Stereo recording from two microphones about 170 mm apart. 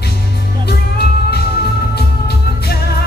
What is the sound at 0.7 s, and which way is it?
Music, 70° left (ahead or behind).